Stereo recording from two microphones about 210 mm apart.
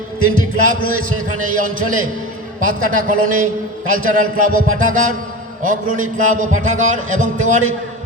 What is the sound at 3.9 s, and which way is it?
A man's voice, 40° right (ahead or behind).